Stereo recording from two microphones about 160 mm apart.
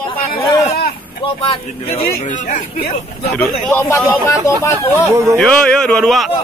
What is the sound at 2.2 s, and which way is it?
Speech, 50° left (ahead or behind).